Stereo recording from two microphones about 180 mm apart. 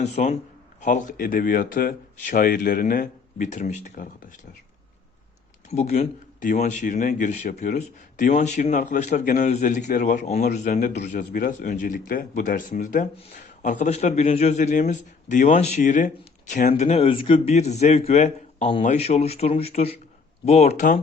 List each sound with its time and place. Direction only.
0.0 s speech: 35° left (ahead or behind)
5.6 s speech: 40° left (ahead or behind)